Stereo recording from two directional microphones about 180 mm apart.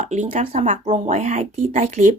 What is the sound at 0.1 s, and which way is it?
A woman's voice, 40° right (ahead or behind).